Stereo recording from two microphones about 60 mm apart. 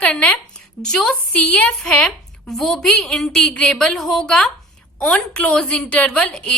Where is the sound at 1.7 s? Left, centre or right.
Centre.